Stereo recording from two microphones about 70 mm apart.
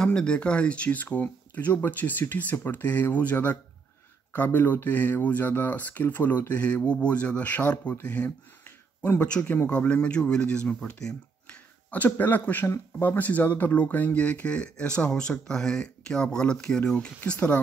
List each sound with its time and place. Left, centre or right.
0.0 s speech: centre
8.6 s a sound: left
9.2 s speech: centre
11.4 s finger snapping: left
12.6 s speech: left